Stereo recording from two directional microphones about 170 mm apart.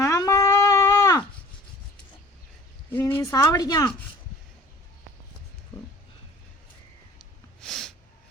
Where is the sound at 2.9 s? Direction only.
15° left (ahead or behind).